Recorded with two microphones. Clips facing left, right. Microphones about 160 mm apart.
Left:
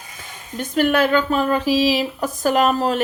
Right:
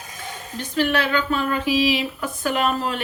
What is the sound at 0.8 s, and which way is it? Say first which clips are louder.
Speech: left 4 dB; 50° left (ahead or behind).